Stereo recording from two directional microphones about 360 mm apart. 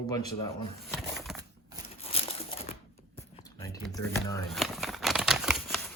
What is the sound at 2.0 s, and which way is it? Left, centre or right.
Crumpling, centre.